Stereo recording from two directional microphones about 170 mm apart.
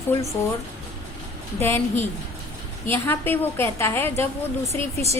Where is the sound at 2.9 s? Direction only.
15° left (ahead or behind).